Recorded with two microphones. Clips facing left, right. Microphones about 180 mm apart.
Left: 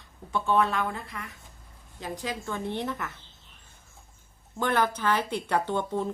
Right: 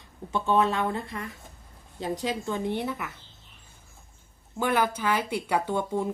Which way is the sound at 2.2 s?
20° right (ahead or behind).